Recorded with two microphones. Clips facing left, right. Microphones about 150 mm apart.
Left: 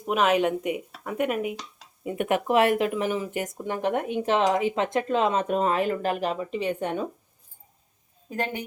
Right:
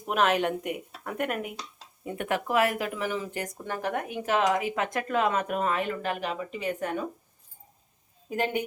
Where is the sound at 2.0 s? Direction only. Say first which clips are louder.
Left 5 dB; 15° left (ahead or behind).